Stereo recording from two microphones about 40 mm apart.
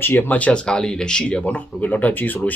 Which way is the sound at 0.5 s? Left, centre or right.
Left.